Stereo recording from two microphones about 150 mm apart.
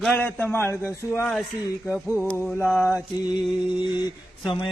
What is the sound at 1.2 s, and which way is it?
Speech, centre (ahead or behind).